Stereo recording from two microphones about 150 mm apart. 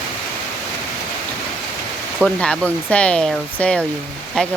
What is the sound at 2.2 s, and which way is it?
Speech, 5° left (ahead or behind).